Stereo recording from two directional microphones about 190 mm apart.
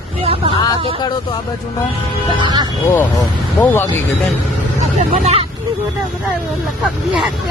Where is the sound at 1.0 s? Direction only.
20° left (ahead or behind).